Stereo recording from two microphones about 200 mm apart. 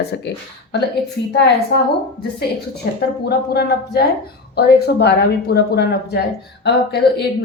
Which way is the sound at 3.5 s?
55° left (ahead or behind).